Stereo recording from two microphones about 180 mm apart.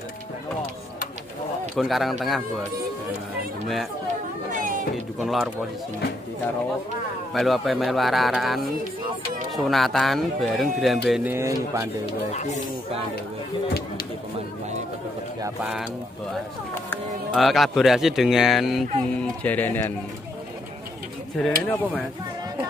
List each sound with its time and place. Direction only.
1.8 s speech: centre (ahead or behind)
4.5 s music: 45° right (ahead or behind)
5.2 s speech: centre (ahead or behind)
7.3 s speech: centre (ahead or behind)
9.7 s speech: centre (ahead or behind)
11.2 s speech: 15° right (ahead or behind)
12.1 s speech: 40° left (ahead or behind)
15.6 s speech: 5° right (ahead or behind)
17.3 s speech: centre (ahead or behind)
21.4 s speech: 5° left (ahead or behind)